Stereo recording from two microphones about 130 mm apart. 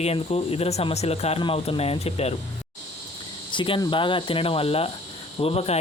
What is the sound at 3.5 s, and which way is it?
Speech, 40° left (ahead or behind).